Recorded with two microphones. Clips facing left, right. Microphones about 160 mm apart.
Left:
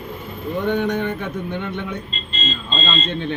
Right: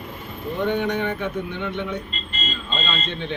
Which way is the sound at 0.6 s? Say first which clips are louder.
Left 2 dB; 45° left (ahead or behind).